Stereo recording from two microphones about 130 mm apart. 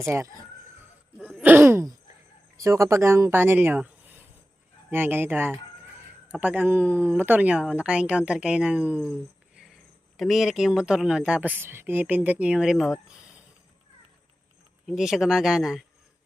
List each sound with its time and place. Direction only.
1.4 s a sound: 15° right (ahead or behind)
2.6 s speech: 25° right (ahead or behind)
4.9 s speech: 15° right (ahead or behind)
10.2 s speech: centre (ahead or behind)
14.8 s speech: 5° right (ahead or behind)